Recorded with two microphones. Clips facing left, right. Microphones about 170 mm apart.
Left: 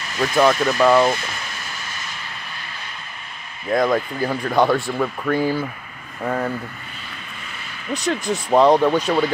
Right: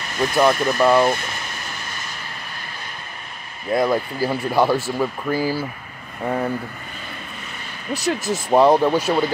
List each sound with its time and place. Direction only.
0.5 s speech: 10° right (ahead or behind)
3.7 s speech: 5° right (ahead or behind)
6.2 s speech: 15° right (ahead or behind)
7.9 s speech: 5° right (ahead or behind)